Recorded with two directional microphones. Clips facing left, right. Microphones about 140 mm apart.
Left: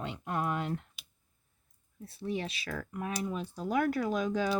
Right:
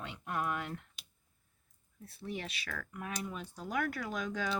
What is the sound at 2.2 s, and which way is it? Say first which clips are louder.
Speech: left 6 dB; 25° left (ahead or behind).